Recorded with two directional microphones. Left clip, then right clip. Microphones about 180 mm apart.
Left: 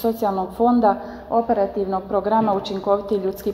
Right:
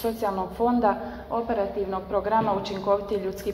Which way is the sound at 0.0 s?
30° left (ahead or behind).